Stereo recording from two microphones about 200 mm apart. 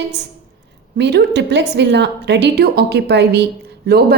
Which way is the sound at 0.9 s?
60° right (ahead or behind).